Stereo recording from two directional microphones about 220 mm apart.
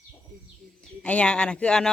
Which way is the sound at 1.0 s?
5° left (ahead or behind).